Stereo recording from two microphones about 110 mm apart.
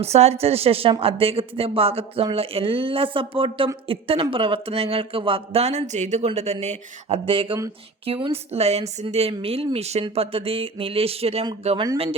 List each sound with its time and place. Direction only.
0.0 s speech: 75° right (ahead or behind)
7.3 s speech: 50° right (ahead or behind)
9.7 s speech: 70° right (ahead or behind)